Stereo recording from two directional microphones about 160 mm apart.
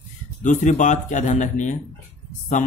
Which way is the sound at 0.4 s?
50° left (ahead or behind).